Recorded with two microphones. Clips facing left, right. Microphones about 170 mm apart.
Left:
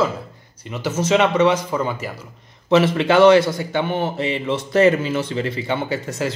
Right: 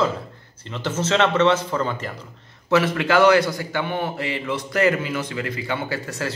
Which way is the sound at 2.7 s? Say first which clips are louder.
Left 4 dB; 20° left (ahead or behind).